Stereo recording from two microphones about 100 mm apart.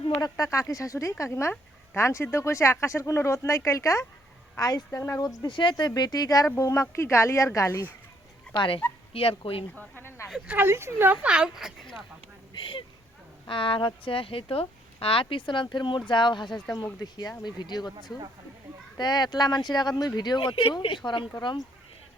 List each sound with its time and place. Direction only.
0.2 s speech: 35° left (ahead or behind)
5.5 s speech: 55° left (ahead or behind); by 7.9 s 30° left (ahead or behind)
8.5 s dog: 15° left (ahead or behind)
9.1 s speech: 70° left (ahead or behind)
9.7 s speech: 20° left (ahead or behind)
10.2 s speech: 10° right (ahead or behind)
10.7 s speech: 25° right (ahead or behind); by 11.9 s 5° right (ahead or behind)
12.5 s speech: 55° left (ahead or behind)
16.6 s speech: 35° left (ahead or behind)
18.9 s speech: 45° left (ahead or behind)